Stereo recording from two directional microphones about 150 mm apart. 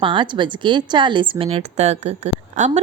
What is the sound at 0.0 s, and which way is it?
Speech, 35° right (ahead or behind).